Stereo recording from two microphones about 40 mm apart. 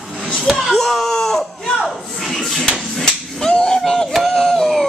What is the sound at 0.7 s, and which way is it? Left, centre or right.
Speech, centre.